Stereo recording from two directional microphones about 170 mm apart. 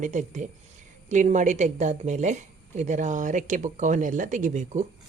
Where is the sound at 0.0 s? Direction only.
45° right (ahead or behind).